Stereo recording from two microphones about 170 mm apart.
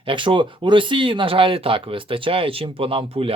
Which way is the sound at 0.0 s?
30° right (ahead or behind).